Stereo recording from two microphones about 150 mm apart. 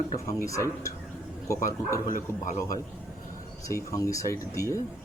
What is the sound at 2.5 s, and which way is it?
Speech, 60° left (ahead or behind).